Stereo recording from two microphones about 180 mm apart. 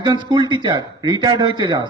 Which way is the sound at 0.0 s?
25° right (ahead or behind).